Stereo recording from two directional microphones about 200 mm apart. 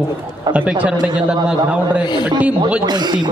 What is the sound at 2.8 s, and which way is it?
Speech, 20° right (ahead or behind).